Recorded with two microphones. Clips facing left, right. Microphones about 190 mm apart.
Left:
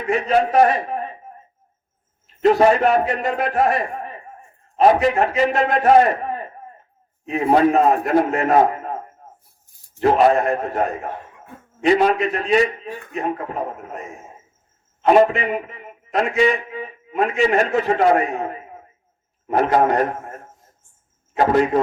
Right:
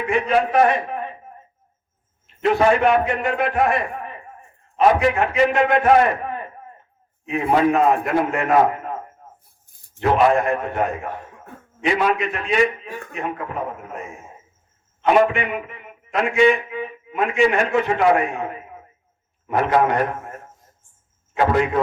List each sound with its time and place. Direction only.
0.0 s a man's voice: 35° left (ahead or behind)
2.4 s a man's voice: 40° left (ahead or behind)
10.0 s a man's voice: 35° left (ahead or behind)
15.0 s a man's voice: 40° left (ahead or behind)
21.3 s a man's voice: 35° left (ahead or behind)